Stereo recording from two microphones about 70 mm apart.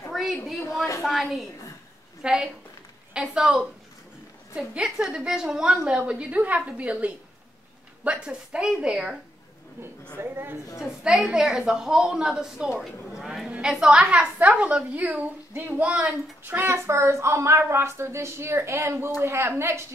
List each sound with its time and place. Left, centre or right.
0.1 s a woman's voice: centre
10.1 s a woman's voice: right
10.8 s a woman's voice: centre
13.2 s a sound: centre
13.7 s a woman's voice: centre
16.4 s a woman's voice: right